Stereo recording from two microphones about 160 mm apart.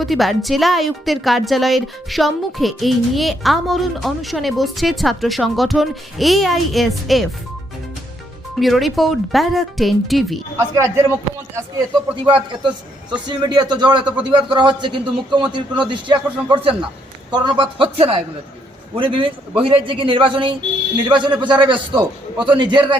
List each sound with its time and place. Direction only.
0.0 s a woman's voice: centre (ahead or behind)
8.5 s a woman's voice: centre (ahead or behind)
10.6 s speech: 20° right (ahead or behind)
12.2 s a man's voice: 30° right (ahead or behind)